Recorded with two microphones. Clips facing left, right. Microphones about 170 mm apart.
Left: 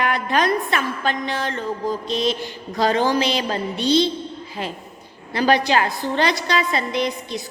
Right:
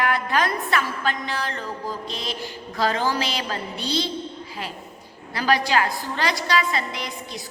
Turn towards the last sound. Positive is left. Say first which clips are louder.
# left 9 dB
turn(degrees=20)  # may be behind; listen again after turning